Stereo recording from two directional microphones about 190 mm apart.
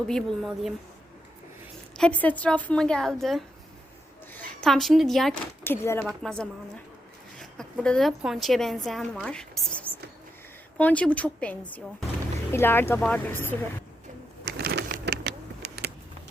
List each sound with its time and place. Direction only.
0.1 s a woman's voice: centre (ahead or behind)
2.0 s a woman's voice: 5° left (ahead or behind)
5.6 s a woman's voice: 15° left (ahead or behind)
14.4 s a sound: 60° right (ahead or behind)